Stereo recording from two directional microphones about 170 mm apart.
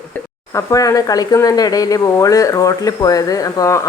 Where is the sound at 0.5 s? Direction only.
20° left (ahead or behind).